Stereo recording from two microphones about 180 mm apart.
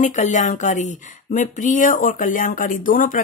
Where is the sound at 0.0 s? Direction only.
45° left (ahead or behind).